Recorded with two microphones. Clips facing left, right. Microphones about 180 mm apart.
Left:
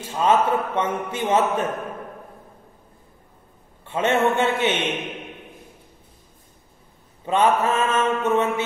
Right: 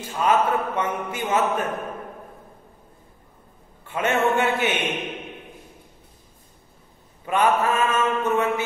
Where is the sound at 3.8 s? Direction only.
25° left (ahead or behind).